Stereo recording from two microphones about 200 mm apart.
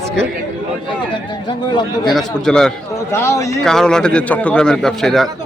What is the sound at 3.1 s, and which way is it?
Speech, 15° left (ahead or behind).